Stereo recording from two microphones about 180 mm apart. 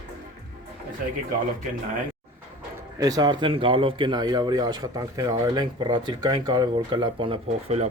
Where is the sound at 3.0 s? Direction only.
20° right (ahead or behind).